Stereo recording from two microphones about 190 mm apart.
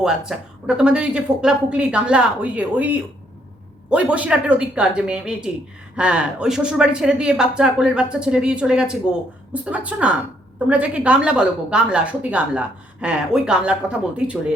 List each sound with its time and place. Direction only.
0.0 s a woman's voice: 5° right (ahead or behind)